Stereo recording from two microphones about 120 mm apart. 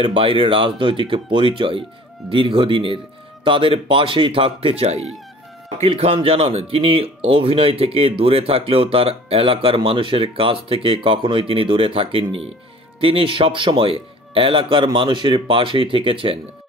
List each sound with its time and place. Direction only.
0.0 s speech: 50° right (ahead or behind)